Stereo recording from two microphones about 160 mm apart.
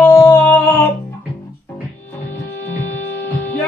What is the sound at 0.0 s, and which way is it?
Music, 15° left (ahead or behind).